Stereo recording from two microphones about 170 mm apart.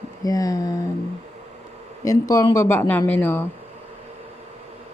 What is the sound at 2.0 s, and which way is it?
Speech, 20° left (ahead or behind).